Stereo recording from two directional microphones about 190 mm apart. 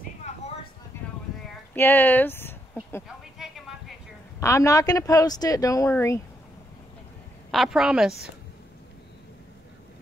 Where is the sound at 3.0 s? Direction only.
Centre (ahead or behind).